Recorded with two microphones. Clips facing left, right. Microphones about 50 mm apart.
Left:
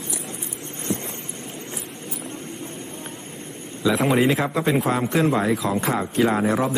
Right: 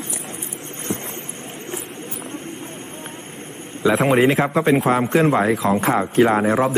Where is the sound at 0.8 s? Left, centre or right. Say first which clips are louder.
Even; right.